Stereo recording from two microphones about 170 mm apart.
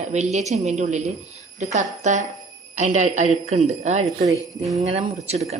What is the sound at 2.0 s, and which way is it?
Speech, 45° right (ahead or behind).